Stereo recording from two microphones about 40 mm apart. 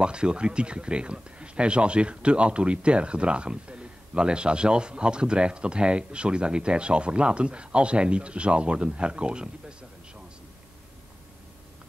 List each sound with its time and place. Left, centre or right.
0.0 s speech: right